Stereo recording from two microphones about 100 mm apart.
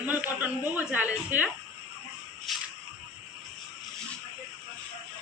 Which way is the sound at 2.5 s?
Centre (ahead or behind).